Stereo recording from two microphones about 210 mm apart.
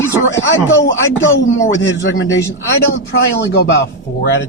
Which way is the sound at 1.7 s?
60° left (ahead or behind).